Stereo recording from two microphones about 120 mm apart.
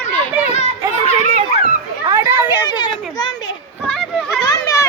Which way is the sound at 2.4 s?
35° left (ahead or behind).